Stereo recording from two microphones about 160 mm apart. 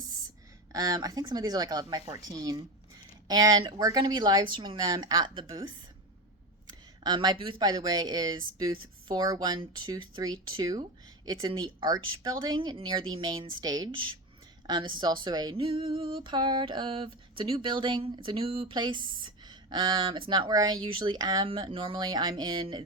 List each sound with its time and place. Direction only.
0.7 s speech: 20° right (ahead or behind)
7.0 s speech: 25° right (ahead or behind)